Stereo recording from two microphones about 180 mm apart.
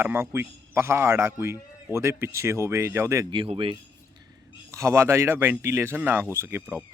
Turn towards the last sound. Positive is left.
turn(degrees=-10)  # may be behind; listen again after turning